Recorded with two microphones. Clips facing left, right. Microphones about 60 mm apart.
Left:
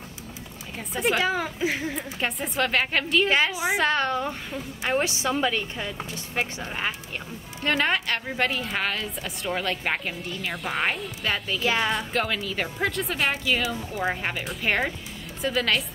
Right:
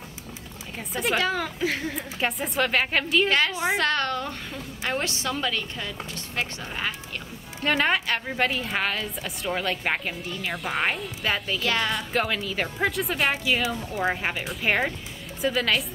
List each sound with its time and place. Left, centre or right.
0.7 s a woman's voice: centre
1.2 s a woman's voice: centre
3.3 s a woman's voice: centre
7.6 s a woman's voice: centre
11.6 s a woman's voice: centre
11.9 s a woman's voice: centre